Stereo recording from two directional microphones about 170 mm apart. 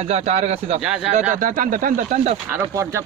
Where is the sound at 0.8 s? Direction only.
5° right (ahead or behind).